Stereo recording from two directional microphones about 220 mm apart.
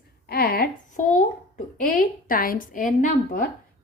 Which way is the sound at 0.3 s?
45° left (ahead or behind).